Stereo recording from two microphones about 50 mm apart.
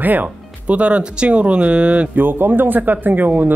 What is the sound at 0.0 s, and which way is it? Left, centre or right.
Speech, right.